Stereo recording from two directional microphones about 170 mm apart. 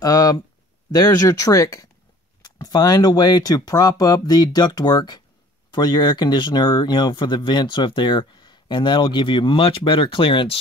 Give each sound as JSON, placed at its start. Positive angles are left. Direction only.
{"t": 0.0, "sound": "speech", "side_deg": 20}